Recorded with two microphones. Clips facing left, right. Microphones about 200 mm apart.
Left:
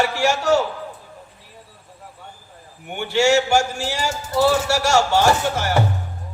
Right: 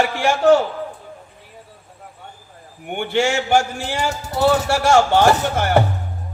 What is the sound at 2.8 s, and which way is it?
Speech, 55° right (ahead or behind).